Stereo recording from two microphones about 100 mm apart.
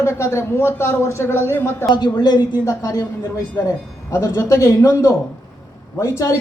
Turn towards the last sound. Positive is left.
turn(degrees=30)  # may be behind; listen again after turning